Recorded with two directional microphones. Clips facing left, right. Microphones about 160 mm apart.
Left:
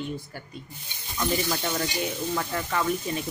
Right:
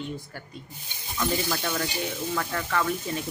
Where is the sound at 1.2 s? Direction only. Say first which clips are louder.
Left 1 dB; 10° left (ahead or behind).